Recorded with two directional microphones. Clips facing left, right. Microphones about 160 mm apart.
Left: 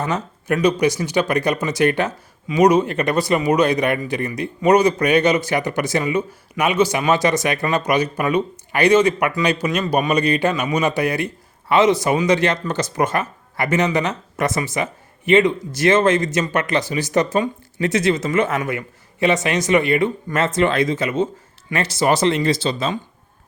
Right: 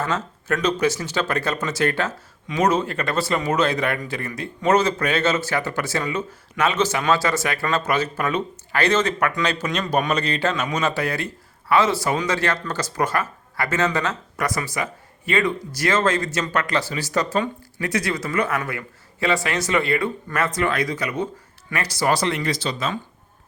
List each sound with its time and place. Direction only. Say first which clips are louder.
0.0 s speech: left 2 dB; 15° left (ahead or behind)